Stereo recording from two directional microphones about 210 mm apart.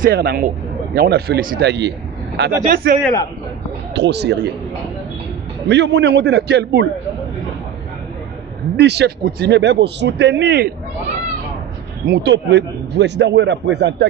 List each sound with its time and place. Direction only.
0.0 s a man's voice: 45° right (ahead or behind)
2.6 s a man's voice: 45° right (ahead or behind)
3.9 s a man's voice: 55° right (ahead or behind)
5.7 s a man's voice: 55° right (ahead or behind)
8.7 s a man's voice: 50° right (ahead or behind)
12.1 s a man's voice: 55° right (ahead or behind)